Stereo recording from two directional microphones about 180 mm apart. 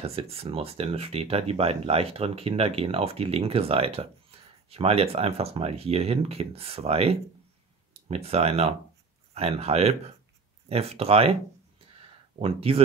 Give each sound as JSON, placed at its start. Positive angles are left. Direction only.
{"t": 0.0, "sound": "speech", "side_deg": -35}
{"t": 12.4, "sound": "speech", "side_deg": -30}